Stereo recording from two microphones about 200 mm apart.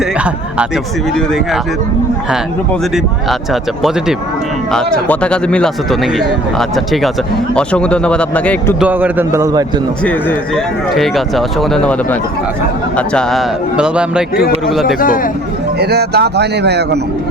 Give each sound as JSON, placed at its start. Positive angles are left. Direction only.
{"t": 2.9, "sound": "speech", "side_deg": 0}
{"t": 8.8, "sound": "a man's voice", "side_deg": -10}
{"t": 10.0, "sound": "speech", "side_deg": 5}
{"t": 13.0, "sound": "speech", "side_deg": 0}
{"t": 14.9, "sound": "speech", "side_deg": 45}
{"t": 15.8, "sound": "speech", "side_deg": -55}